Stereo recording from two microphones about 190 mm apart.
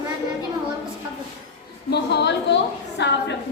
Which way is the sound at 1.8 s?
60° left (ahead or behind).